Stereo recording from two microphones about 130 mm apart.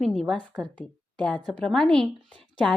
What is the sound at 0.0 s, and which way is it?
A woman's voice, 5° left (ahead or behind).